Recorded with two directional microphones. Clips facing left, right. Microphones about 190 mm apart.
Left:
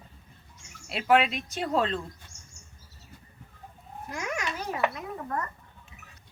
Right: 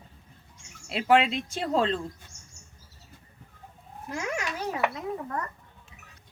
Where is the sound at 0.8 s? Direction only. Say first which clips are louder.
Right 1 dB; 25° right (ahead or behind).